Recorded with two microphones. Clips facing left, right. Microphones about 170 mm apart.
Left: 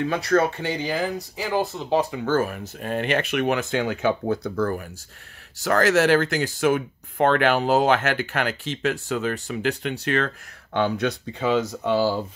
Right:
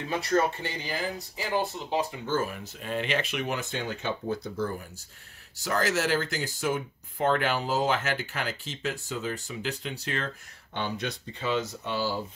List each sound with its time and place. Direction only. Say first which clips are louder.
0.1 s speech: left 1 dB; 70° left (ahead or behind); by 12.1 s 90° left